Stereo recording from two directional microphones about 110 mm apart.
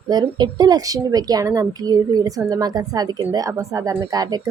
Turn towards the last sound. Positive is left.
turn(degrees=-35)  # may be behind; listen again after turning